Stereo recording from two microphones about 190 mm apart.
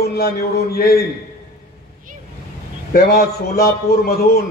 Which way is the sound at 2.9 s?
55° left (ahead or behind).